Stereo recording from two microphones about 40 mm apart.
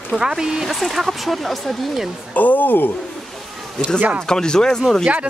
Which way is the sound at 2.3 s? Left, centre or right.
Left.